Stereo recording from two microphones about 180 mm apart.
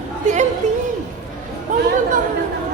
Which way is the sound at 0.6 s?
40° right (ahead or behind).